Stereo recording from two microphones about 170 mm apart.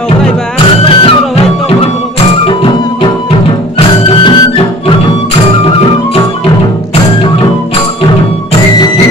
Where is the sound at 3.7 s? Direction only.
25° left (ahead or behind).